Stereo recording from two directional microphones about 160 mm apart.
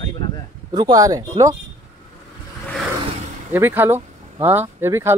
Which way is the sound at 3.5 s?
15° right (ahead or behind).